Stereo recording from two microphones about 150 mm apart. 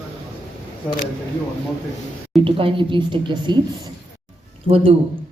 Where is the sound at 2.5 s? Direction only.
35° right (ahead or behind).